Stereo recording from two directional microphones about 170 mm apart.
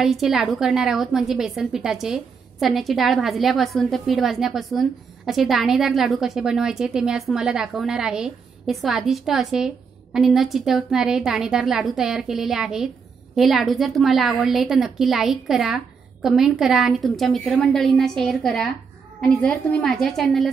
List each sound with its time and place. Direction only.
0.0 s a woman's voice: centre (ahead or behind)